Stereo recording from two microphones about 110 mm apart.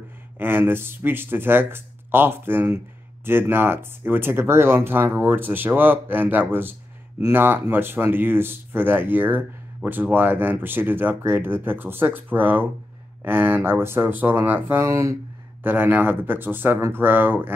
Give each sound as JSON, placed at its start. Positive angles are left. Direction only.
{"t": 0.4, "sound": "speech", "side_deg": -20}
{"t": 15.6, "sound": "speech", "side_deg": -15}